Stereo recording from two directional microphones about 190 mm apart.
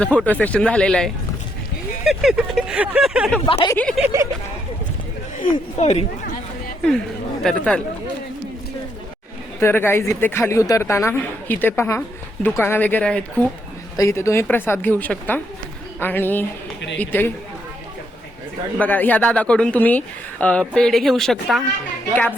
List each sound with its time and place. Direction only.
0.0 s speech: 5° left (ahead or behind)
3.4 s speech: 25° left (ahead or behind)
3.8 s speech: 5° left (ahead or behind)
5.4 s chatter: 35° left (ahead or behind)
7.4 s speech: 5° left (ahead or behind)
9.6 s speech: 10° left (ahead or behind)
18.8 s speech: 10° left (ahead or behind)